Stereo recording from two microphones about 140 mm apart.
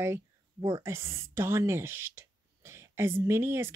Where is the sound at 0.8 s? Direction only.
20° right (ahead or behind).